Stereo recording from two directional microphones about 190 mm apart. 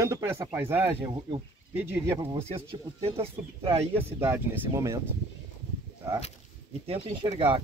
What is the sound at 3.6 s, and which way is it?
Speech, 10° right (ahead or behind).